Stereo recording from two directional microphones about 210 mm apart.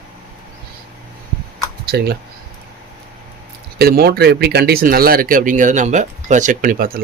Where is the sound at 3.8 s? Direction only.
45° right (ahead or behind).